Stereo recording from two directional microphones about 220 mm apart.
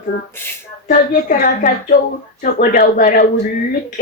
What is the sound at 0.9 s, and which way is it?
Speech, 35° left (ahead or behind).